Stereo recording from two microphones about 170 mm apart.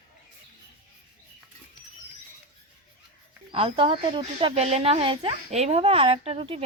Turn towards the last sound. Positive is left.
turn(degrees=-35)  # may be behind; listen again after turning